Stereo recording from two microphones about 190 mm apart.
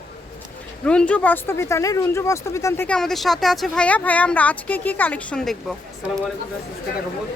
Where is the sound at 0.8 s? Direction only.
5° left (ahead or behind).